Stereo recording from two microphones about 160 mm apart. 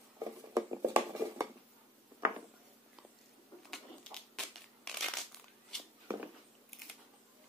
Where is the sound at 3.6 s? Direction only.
5° left (ahead or behind).